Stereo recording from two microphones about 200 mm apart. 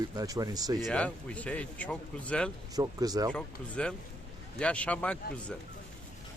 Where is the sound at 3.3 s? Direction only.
5° left (ahead or behind).